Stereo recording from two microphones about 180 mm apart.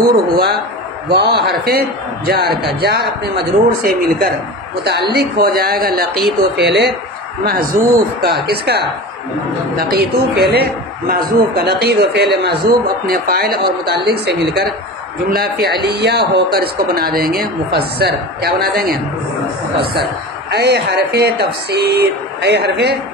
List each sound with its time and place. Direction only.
0.1 s a man's voice: 60° right (ahead or behind)
6.5 s speech: 70° right (ahead or behind)
7.4 s a man's voice: 50° right (ahead or behind)
9.9 s a man's voice: 65° right (ahead or behind)
14.1 s a man's voice: 70° right (ahead or behind)
20.5 s a man's voice: 65° right (ahead or behind)